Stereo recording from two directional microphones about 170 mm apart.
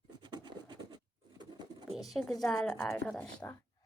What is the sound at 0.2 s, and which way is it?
Scratch, 25° right (ahead or behind).